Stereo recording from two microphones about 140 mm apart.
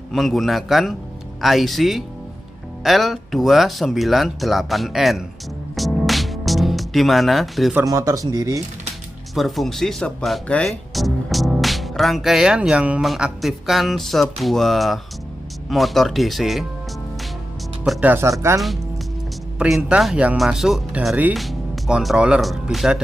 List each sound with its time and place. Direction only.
0.1 s speech: centre (ahead or behind)
5.8 s music: centre (ahead or behind)
7.8 s speech: 25° right (ahead or behind)
9.3 s speech: centre (ahead or behind)
18.0 s speech: 15° right (ahead or behind)
19.6 s speech: 5° right (ahead or behind)